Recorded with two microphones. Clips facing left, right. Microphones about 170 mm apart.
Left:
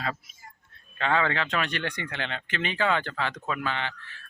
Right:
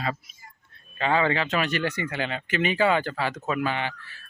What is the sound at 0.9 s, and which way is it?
Speech, 5° right (ahead or behind).